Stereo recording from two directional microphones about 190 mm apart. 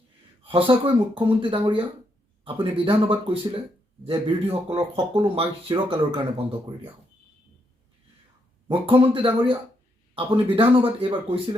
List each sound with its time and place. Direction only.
0.4 s speech: 25° right (ahead or behind)
8.6 s speech: 25° right (ahead or behind)